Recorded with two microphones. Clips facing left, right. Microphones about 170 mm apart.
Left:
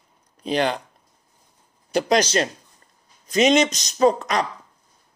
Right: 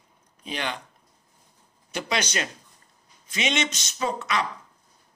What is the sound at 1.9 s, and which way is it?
Speech, 40° left (ahead or behind).